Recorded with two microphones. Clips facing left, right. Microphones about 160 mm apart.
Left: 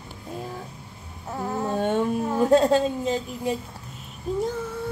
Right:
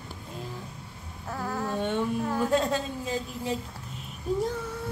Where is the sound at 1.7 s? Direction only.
45° left (ahead or behind).